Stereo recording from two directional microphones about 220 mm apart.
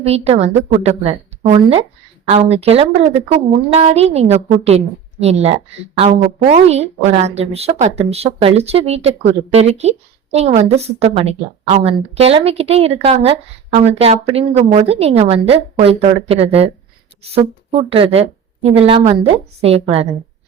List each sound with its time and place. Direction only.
0.0 s a woman's voice: 30° right (ahead or behind)